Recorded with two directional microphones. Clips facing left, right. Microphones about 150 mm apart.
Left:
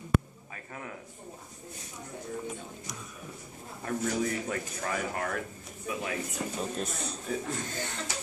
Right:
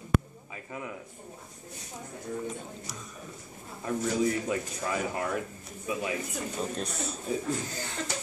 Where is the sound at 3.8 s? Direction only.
20° right (ahead or behind).